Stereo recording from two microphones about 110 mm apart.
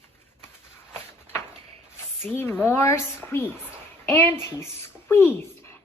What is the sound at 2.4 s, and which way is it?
A woman's voice, 20° left (ahead or behind).